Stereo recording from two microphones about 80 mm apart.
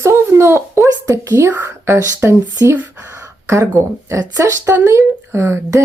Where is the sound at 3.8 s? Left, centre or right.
Right.